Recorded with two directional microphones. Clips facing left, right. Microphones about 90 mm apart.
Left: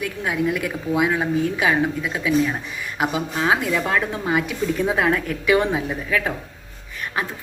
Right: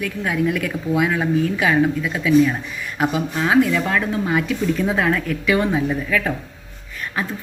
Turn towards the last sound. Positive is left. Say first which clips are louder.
# right 3 dB
turn(degrees=20)  # may be behind; listen again after turning